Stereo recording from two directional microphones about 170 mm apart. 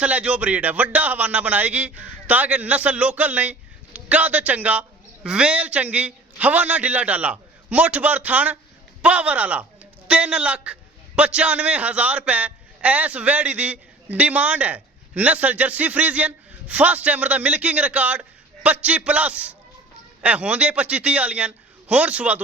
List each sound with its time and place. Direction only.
0.0 s a man's voice: 5° right (ahead or behind)